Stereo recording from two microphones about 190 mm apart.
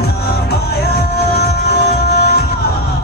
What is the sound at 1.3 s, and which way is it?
Music, 60° left (ahead or behind).